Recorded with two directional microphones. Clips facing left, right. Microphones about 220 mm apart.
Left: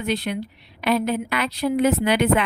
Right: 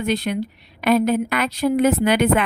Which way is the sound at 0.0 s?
45° right (ahead or behind).